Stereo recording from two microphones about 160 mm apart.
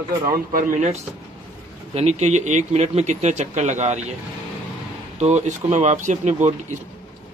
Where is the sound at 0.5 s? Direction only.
55° right (ahead or behind).